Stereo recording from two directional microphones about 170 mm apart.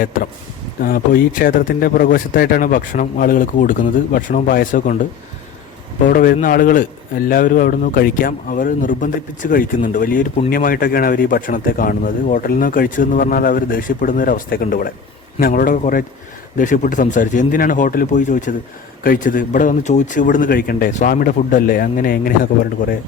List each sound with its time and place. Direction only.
0.0 s a man's voice: 55° left (ahead or behind)